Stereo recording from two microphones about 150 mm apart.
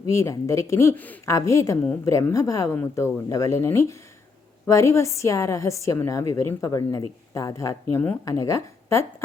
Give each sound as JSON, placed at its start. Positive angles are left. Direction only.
{"t": 0.0, "sound": "a woman's voice", "side_deg": 20}